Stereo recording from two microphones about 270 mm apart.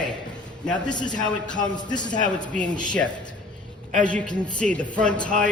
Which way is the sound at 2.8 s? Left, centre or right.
Centre.